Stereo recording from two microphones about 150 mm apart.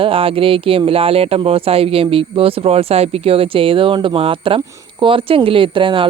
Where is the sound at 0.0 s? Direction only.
40° right (ahead or behind).